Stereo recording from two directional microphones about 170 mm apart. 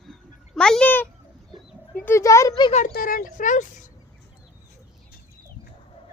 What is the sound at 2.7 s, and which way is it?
Speech, 45° left (ahead or behind).